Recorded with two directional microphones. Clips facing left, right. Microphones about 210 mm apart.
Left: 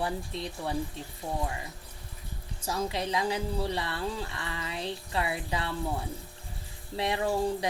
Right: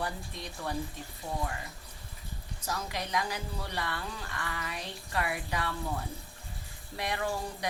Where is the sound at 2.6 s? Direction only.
30° left (ahead or behind).